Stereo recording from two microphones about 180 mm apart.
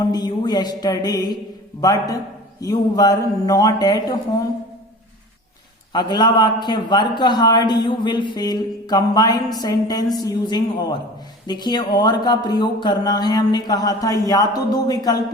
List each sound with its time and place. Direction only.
0.0 s a man's voice: 20° left (ahead or behind)
5.9 s a man's voice: 25° left (ahead or behind)